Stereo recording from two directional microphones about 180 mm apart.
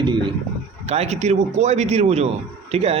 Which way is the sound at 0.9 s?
35° right (ahead or behind).